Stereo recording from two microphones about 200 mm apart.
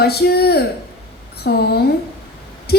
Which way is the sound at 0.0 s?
55° left (ahead or behind).